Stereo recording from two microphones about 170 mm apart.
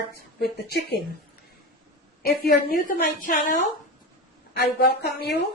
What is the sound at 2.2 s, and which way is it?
A woman's voice, 55° left (ahead or behind).